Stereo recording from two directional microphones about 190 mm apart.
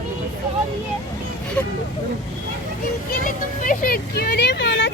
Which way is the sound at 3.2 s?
45° left (ahead or behind).